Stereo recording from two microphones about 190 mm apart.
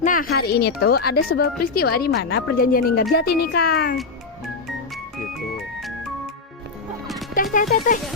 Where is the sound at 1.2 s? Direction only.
90° left.